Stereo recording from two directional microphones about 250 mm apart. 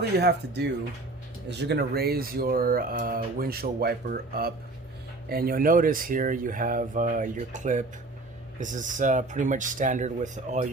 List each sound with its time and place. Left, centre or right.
0.0 s speech: right